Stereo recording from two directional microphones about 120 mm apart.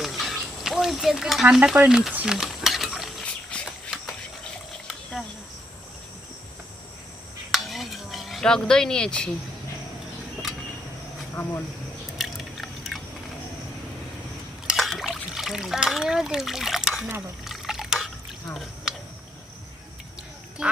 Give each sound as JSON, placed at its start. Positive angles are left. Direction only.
{"t": 0.0, "sound": "frying", "side_deg": 0}
{"t": 7.5, "sound": "a sound", "side_deg": 0}
{"t": 11.4, "sound": "speech", "side_deg": 20}
{"t": 12.1, "sound": "drip", "side_deg": 0}
{"t": 14.7, "sound": "trickle", "side_deg": 0}
{"t": 17.4, "sound": "drip", "side_deg": 0}
{"t": 20.6, "sound": "speech", "side_deg": -5}